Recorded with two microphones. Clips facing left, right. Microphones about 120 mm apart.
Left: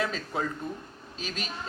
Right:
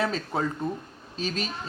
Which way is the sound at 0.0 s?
30° right (ahead or behind).